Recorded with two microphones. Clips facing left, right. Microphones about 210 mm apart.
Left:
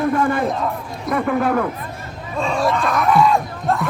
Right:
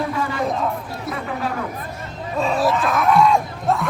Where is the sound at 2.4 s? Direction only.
5° right (ahead or behind).